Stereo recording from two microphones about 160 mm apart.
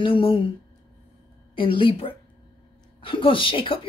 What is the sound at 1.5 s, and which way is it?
Speech, 35° left (ahead or behind).